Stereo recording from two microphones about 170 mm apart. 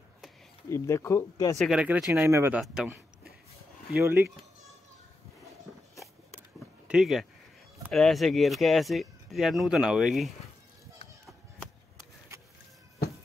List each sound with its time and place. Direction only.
0.7 s speech: 15° left (ahead or behind)
1.6 s speech: 5° right (ahead or behind)
2.6 s speech: 5° right (ahead or behind)
6.9 s speech: centre (ahead or behind)